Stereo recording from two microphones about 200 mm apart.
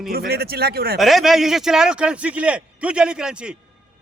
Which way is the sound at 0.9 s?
Centre (ahead or behind).